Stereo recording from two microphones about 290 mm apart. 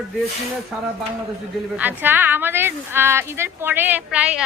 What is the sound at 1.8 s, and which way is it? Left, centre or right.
A woman's voice, centre.